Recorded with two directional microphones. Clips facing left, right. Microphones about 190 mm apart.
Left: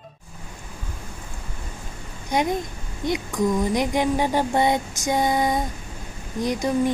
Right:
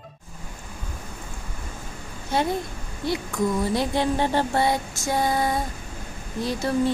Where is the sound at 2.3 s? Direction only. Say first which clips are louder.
Left 1 dB; 15° left (ahead or behind).